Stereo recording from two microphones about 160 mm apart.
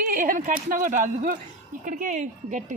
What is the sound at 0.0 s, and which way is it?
A woman's voice, 60° right (ahead or behind).